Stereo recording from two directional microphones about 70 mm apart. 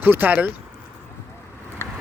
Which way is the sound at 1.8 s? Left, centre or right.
Left.